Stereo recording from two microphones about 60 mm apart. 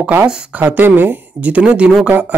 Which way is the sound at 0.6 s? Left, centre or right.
Right.